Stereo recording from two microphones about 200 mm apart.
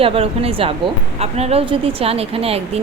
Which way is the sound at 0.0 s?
30° right (ahead or behind).